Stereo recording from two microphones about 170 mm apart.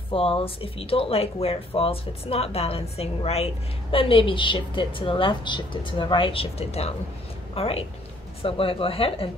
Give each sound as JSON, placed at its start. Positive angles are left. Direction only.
{"t": 0.1, "sound": "a woman's voice", "side_deg": 30}